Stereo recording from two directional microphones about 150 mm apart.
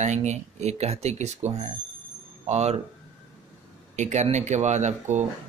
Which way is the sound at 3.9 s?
50° right (ahead or behind).